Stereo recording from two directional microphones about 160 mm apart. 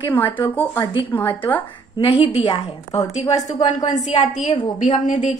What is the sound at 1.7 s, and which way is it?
A woman's voice, 30° left (ahead or behind).